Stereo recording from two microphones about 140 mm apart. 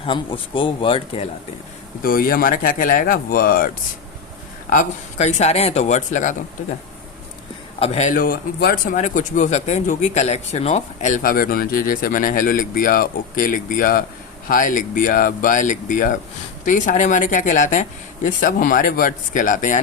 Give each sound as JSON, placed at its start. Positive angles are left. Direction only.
{"t": 0.0, "sound": "a man's voice", "side_deg": 35}
{"t": 2.0, "sound": "speech", "side_deg": 90}
{"t": 5.1, "sound": "speech", "side_deg": 55}
{"t": 7.8, "sound": "a man's voice", "side_deg": 55}